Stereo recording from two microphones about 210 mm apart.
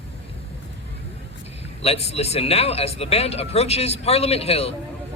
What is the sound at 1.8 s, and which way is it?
A woman's voice, 30° left (ahead or behind).